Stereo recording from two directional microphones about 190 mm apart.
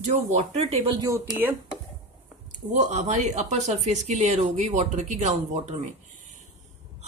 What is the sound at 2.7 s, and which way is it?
Speech, 40° right (ahead or behind).